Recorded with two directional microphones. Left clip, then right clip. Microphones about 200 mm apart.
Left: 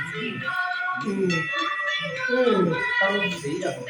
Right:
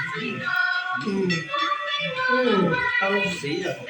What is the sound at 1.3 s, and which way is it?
Music, 50° left (ahead or behind).